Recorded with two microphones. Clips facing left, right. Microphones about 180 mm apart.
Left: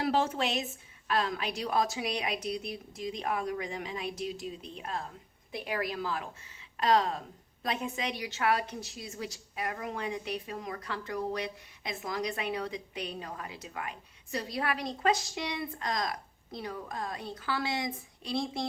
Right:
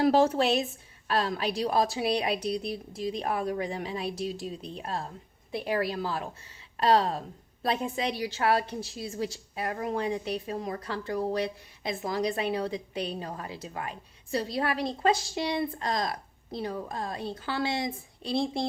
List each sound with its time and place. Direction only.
0.0 s a woman's voice: 40° right (ahead or behind)